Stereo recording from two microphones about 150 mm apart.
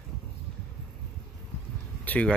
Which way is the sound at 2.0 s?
10° left (ahead or behind).